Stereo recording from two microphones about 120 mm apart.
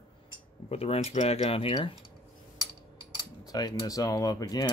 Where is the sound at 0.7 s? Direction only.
55° left (ahead or behind).